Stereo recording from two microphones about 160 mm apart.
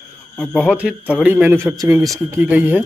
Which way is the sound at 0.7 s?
5° right (ahead or behind).